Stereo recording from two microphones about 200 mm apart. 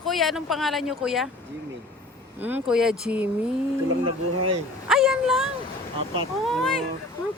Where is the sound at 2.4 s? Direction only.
5° right (ahead or behind).